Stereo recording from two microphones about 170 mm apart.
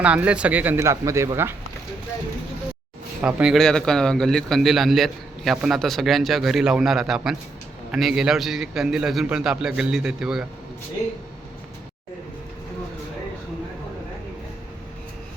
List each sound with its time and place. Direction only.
0.0 s speech: 5° right (ahead or behind)
3.2 s a man's voice: 5° right (ahead or behind)